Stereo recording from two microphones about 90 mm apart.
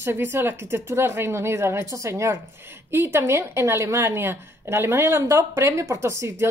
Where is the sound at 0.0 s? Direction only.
25° right (ahead or behind).